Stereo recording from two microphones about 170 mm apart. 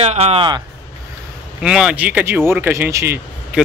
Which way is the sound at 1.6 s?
5° right (ahead or behind).